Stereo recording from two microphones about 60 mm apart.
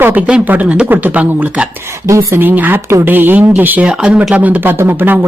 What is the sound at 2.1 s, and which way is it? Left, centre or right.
Speech, right.